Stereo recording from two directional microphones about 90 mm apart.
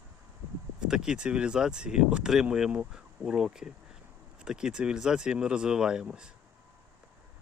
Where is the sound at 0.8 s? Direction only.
10° right (ahead or behind).